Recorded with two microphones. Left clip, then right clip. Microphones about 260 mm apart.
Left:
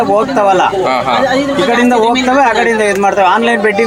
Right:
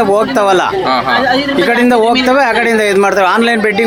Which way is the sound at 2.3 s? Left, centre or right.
Right.